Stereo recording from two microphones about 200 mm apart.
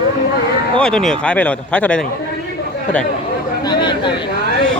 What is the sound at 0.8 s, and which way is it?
Speech, 5° left (ahead or behind).